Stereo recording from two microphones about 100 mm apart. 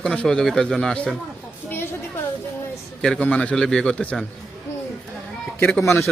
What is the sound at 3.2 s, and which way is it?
A man's voice, 15° left (ahead or behind).